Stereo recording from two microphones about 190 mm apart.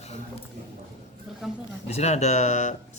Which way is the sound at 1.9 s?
35° left (ahead or behind).